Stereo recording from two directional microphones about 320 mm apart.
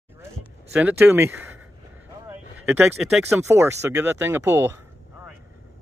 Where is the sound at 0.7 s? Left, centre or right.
Centre.